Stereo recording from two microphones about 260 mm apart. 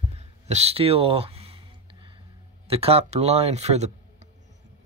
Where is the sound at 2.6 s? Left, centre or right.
Right.